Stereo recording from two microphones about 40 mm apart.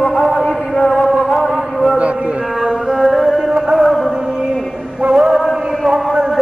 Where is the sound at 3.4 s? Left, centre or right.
Centre.